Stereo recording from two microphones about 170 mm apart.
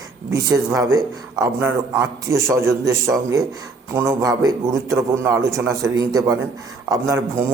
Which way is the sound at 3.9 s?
15° right (ahead or behind).